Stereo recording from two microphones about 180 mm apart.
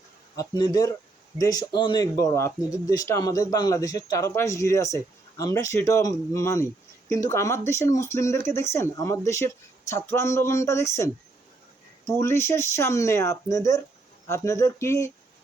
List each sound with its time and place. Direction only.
0.3 s speech: 20° left (ahead or behind)